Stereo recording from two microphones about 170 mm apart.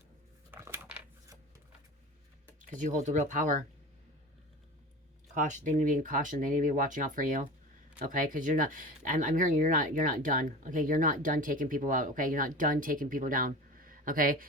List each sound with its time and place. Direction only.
0.5 s a sound: 15° right (ahead or behind)
2.6 s speech: 50° right (ahead or behind)
5.3 s speech: 45° right (ahead or behind)